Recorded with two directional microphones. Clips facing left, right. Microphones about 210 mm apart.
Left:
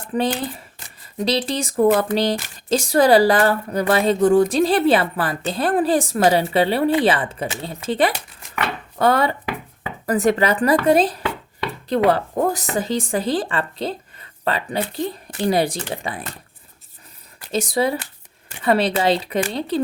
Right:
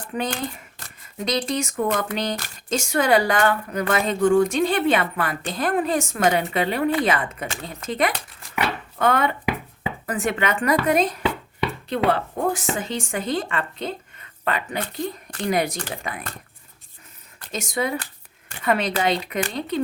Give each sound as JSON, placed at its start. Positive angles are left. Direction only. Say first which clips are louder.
{"t": 1.2, "sound": "speech", "louder": "left 3 dB", "side_deg": 30}
{"t": 17.5, "sound": "speech", "louder": "left 5 dB", "side_deg": 35}